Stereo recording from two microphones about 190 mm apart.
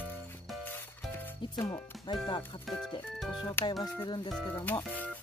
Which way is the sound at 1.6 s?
20° left (ahead or behind).